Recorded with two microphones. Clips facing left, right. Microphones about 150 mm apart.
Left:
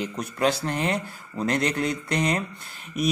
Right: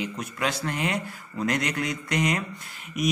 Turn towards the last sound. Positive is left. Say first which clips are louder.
# left 1 dB
turn(degrees=30)  # may be behind; listen again after turning